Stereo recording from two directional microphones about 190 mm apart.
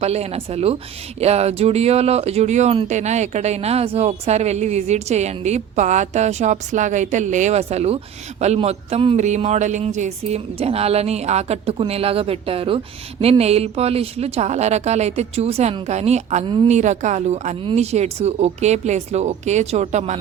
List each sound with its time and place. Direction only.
0.0 s a woman's voice: 35° right (ahead or behind)